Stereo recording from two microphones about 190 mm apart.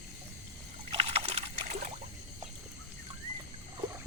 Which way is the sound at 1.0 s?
30° right (ahead or behind).